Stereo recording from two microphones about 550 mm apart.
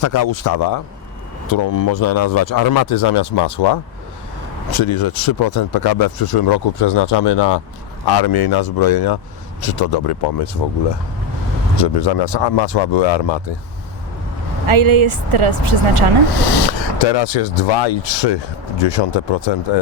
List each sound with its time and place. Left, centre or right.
0.0 s speech: left
11.8 s speech: left
14.7 s speech: right
16.6 s speech: left